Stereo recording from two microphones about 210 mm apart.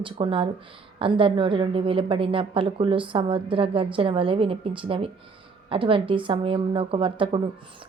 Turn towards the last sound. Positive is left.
turn(degrees=-25)  # may be behind; listen again after turning